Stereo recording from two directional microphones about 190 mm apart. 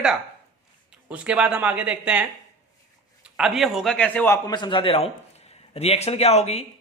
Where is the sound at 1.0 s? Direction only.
5° right (ahead or behind).